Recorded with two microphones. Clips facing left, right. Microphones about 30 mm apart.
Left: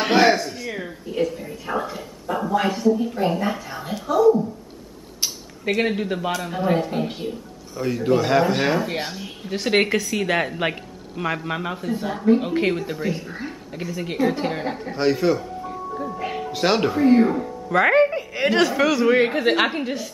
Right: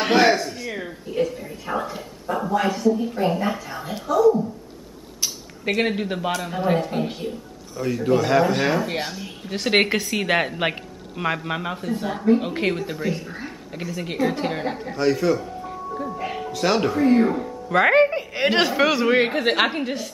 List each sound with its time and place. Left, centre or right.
0.0 s speech: centre
5.7 s speech: centre
9.8 s a woman's voice: centre
15.4 s music: centre
16.5 s speech: centre
18.1 s a woman's voice: right
19.3 s speech: centre